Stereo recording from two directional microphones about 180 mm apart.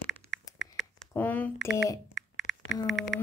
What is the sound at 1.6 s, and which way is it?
Speech, 5° right (ahead or behind).